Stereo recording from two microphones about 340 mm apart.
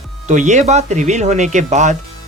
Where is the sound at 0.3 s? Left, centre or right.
Right.